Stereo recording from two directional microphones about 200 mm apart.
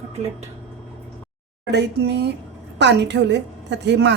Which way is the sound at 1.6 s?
60° right (ahead or behind).